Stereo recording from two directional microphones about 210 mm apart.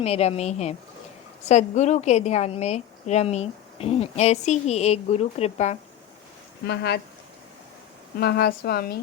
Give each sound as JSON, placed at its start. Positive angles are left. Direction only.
{"t": 0.0, "sound": "a woman's voice", "side_deg": 30}
{"t": 6.7, "sound": "speech", "side_deg": 50}
{"t": 8.2, "sound": "speech", "side_deg": 50}